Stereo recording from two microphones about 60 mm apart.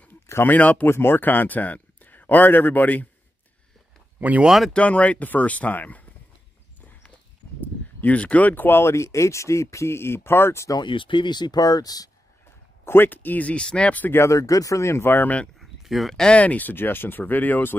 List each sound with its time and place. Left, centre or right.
0.5 s speech: left
0.8 s speech: left
4.2 s speech: right
4.5 s speech: centre
4.7 s speech: left
7.6 s speech: left
11.6 s speech: left
12.8 s speech: left
14.1 s speech: left
15.6 s a sound: centre
16.2 s speech: centre